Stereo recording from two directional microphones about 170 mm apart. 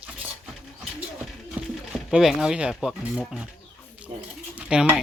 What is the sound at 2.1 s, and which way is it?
Speech, centre (ahead or behind).